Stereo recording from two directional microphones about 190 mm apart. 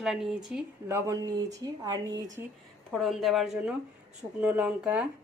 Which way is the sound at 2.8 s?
Centre (ahead or behind).